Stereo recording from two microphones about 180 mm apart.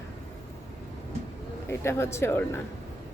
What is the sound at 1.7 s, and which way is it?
Speech, 15° left (ahead or behind).